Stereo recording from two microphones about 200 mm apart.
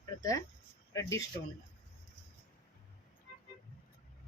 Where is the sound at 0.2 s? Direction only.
15° left (ahead or behind).